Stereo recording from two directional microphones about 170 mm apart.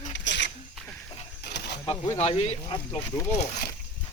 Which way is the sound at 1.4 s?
75° left (ahead or behind).